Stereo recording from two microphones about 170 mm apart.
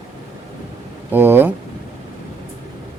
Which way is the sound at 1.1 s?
10° right (ahead or behind).